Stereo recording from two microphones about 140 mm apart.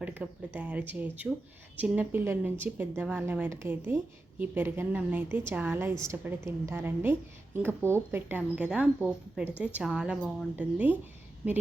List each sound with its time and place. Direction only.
0.0 s a woman's voice: 10° right (ahead or behind)